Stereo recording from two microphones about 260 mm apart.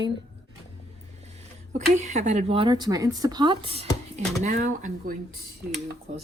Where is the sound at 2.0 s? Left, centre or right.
Right.